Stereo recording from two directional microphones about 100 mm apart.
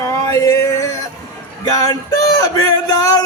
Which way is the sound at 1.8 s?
40° left (ahead or behind).